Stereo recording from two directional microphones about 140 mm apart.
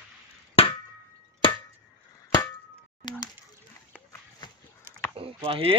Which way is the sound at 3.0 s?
30° left (ahead or behind).